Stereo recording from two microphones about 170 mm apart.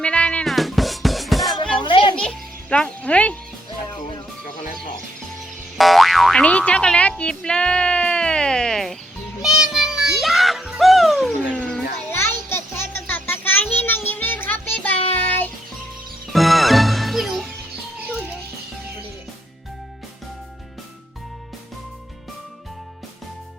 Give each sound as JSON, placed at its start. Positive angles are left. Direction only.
{"t": 0.0, "sound": "music", "side_deg": 5}
{"t": 1.7, "sound": "children playing", "side_deg": 30}
{"t": 2.1, "sound": "music", "side_deg": 5}
{"t": 5.7, "sound": "boing", "side_deg": 0}
{"t": 9.4, "sound": "music", "side_deg": -5}
{"t": 12.1, "sound": "music", "side_deg": 15}
{"t": 16.3, "sound": "music", "side_deg": 0}